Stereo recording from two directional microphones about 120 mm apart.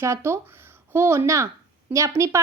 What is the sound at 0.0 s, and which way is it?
Speech, 25° right (ahead or behind).